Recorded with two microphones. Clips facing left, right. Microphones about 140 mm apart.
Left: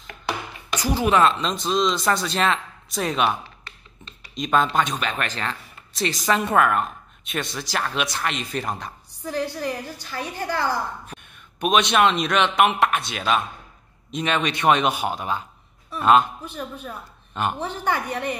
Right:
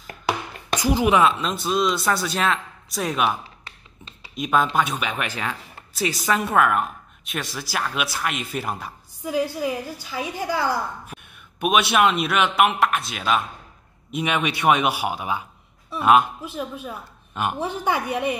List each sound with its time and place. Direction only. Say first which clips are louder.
0.7 s speech: right 1 dB; 15° right (ahead or behind)
4.4 s a woman's voice: even; 5° right (ahead or behind)